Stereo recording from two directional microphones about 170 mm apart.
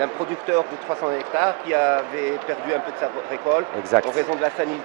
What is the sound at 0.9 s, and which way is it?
Speech, 25° right (ahead or behind).